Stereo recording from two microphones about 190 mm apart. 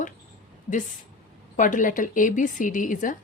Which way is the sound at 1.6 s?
45° left (ahead or behind).